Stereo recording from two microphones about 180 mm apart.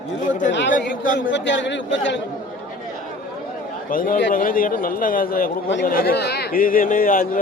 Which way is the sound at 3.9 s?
50° left (ahead or behind).